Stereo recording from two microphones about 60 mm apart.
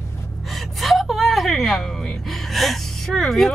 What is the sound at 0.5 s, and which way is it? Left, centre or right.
A woman's voice, centre.